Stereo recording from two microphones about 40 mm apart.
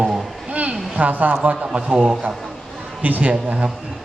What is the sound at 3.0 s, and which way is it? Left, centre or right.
Speech, right.